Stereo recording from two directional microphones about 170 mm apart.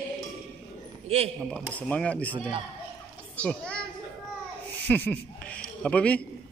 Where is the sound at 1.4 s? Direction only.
5° left (ahead or behind).